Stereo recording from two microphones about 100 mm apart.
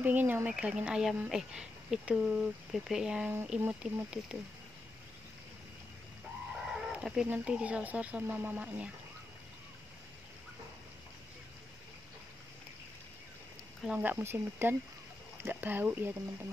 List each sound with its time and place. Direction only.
0.0 s speech: 20° right (ahead or behind)
6.5 s livestock: 5° right (ahead or behind)
7.2 s speech: 10° right (ahead or behind)
13.8 s speech: 15° right (ahead or behind)